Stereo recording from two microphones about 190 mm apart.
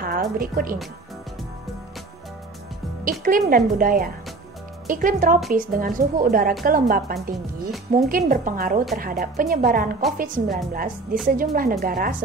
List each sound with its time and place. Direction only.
0.0 s a woman's voice: 50° right (ahead or behind)
3.1 s speech: 45° right (ahead or behind)